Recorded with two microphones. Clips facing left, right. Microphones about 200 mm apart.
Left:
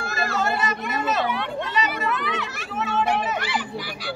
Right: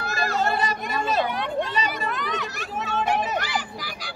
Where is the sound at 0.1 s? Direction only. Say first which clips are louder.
Right 1 dB; 35° right (ahead or behind).